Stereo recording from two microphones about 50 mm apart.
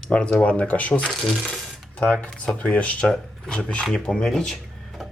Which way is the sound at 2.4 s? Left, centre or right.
Left.